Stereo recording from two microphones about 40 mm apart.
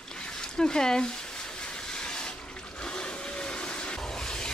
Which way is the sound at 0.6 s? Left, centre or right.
Centre.